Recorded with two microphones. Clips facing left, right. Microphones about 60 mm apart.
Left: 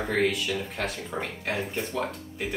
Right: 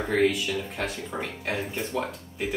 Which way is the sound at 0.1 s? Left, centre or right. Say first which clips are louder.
Right 3 dB; centre.